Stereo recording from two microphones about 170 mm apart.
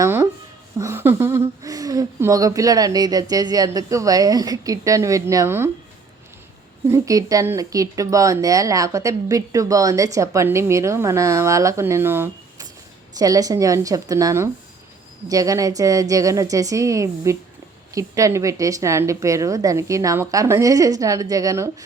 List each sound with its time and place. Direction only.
0.0 s a sound: 15° right (ahead or behind)
0.8 s speech: 15° right (ahead or behind)
6.8 s speech: 20° right (ahead or behind)